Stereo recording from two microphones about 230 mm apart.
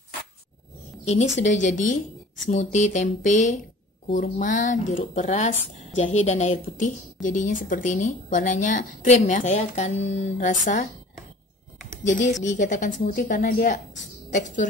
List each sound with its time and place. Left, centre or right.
1.0 s a woman's voice: left
12.6 s a woman's voice: left